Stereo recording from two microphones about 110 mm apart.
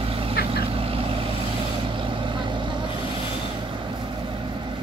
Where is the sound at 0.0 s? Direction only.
55° right (ahead or behind).